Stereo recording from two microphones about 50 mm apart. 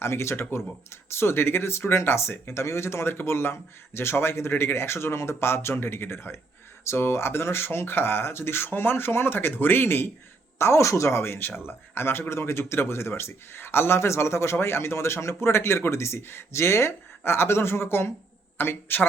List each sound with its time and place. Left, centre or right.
0.0 s speech: left
10.6 s speech: left